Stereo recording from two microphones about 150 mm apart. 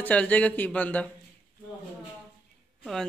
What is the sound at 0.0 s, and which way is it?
Speech, 10° left (ahead or behind).